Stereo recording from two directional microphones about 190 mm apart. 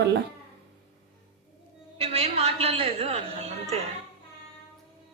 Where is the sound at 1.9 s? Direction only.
30° right (ahead or behind).